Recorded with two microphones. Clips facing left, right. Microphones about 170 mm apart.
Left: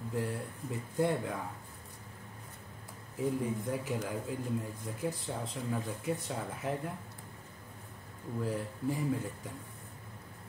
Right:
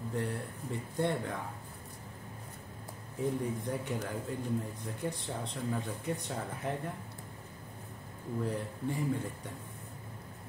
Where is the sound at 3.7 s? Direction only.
5° left (ahead or behind).